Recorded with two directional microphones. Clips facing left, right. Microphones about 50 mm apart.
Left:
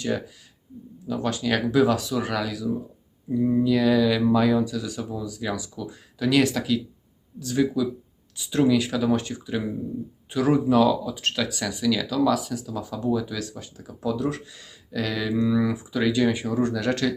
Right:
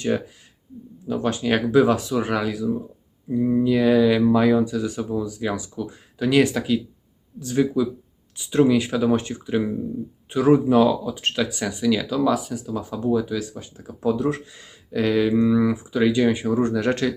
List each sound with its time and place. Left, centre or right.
0.0 s speech: right
13.7 s speech: right